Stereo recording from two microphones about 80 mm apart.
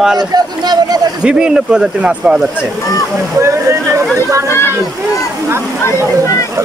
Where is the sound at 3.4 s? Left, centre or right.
Right.